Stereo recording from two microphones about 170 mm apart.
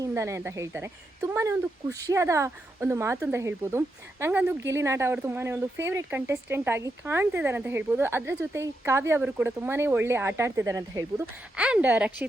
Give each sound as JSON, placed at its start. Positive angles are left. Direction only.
{"t": 0.0, "sound": "speech", "side_deg": -15}
{"t": 11.5, "sound": "speech", "side_deg": -5}